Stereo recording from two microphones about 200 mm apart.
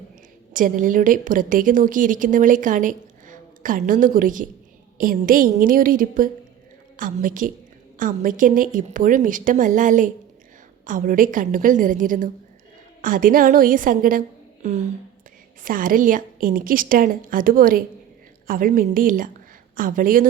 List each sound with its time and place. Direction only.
0.5 s a woman's voice: 40° right (ahead or behind)